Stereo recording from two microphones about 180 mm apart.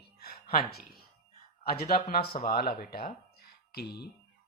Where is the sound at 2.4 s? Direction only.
55° left (ahead or behind).